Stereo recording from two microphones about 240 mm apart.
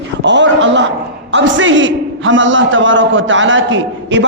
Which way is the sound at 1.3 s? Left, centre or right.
Right.